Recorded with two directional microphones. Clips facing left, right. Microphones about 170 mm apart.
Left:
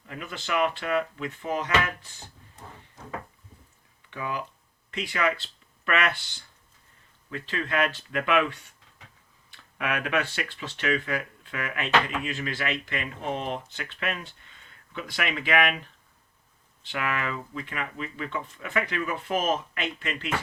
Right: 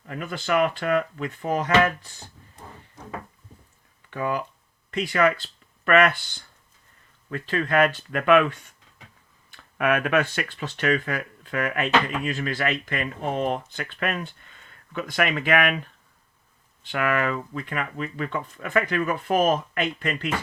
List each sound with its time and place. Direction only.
0.1 s speech: 45° right (ahead or behind)
4.1 s speech: 45° right (ahead or behind)
7.3 s speech: 45° right (ahead or behind)
16.8 s speech: 50° right (ahead or behind)